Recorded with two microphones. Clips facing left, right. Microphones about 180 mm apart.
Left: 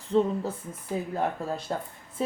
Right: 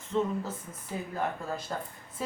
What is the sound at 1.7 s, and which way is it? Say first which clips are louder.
Speech: left 5 dB; 25° left (ahead or behind).